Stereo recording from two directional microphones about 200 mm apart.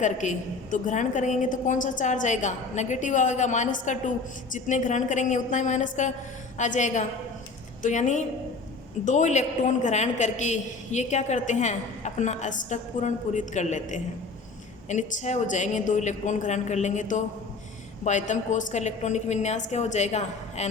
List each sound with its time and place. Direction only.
0.0 s a man's voice: 40° left (ahead or behind)